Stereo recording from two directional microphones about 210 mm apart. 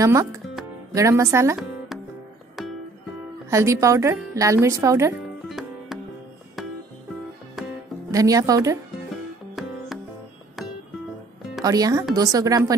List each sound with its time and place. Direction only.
0.0 s speech: 15° right (ahead or behind)
3.4 s speech: 15° right (ahead or behind)
5.5 s music: centre (ahead or behind)
8.1 s speech: 15° right (ahead or behind)
9.6 s music: centre (ahead or behind)
11.6 s speech: 15° right (ahead or behind)